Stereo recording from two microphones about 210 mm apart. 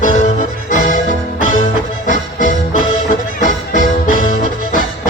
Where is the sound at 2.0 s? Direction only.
35° left (ahead or behind).